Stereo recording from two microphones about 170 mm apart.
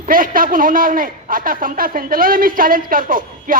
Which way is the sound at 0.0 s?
55° right (ahead or behind).